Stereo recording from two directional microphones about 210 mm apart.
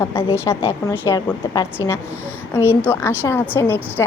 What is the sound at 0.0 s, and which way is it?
Speech, 10° left (ahead or behind).